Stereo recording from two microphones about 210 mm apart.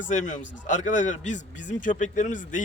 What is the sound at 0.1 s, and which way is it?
A man's voice, 35° left (ahead or behind).